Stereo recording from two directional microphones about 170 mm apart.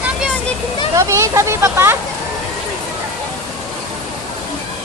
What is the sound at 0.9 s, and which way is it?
Speech, 15° right (ahead or behind).